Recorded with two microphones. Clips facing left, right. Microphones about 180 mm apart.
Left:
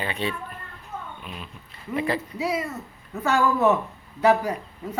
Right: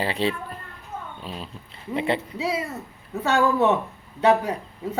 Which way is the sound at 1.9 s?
25° right (ahead or behind).